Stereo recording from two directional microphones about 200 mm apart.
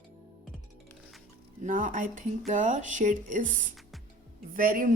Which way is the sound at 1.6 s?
40° right (ahead or behind).